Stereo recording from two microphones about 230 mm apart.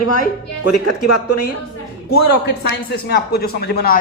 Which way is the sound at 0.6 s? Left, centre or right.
Left.